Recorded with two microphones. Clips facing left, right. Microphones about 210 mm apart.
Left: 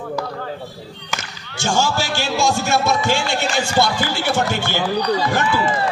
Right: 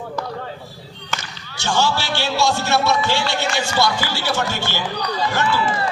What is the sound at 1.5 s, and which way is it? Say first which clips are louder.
A man's voice: left 1 dB; 45° left (ahead or behind).